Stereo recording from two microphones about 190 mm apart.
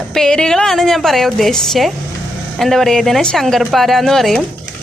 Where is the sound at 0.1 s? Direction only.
5° left (ahead or behind).